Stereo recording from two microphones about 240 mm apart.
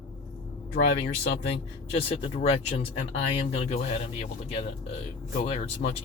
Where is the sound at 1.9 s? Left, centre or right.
Left.